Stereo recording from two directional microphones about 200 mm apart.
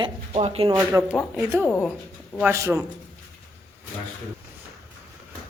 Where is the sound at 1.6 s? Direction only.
10° left (ahead or behind).